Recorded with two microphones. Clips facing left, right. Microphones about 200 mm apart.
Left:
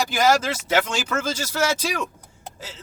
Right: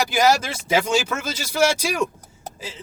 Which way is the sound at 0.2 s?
10° right (ahead or behind).